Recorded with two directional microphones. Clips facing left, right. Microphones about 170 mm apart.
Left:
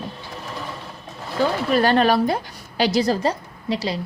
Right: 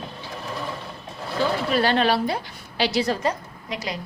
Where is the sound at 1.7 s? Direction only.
45° left (ahead or behind).